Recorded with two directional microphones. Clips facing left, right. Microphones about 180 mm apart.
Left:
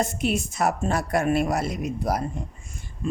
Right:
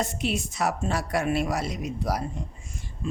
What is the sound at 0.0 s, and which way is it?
A man's voice, 50° left (ahead or behind).